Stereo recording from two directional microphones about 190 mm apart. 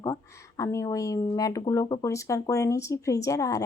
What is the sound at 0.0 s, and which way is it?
Speech, 15° left (ahead or behind).